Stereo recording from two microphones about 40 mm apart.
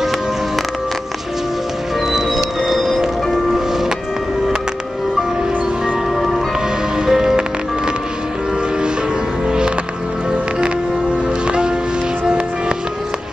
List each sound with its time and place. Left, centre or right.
2.1 s music: centre
7.1 s music: centre
11.4 s music: right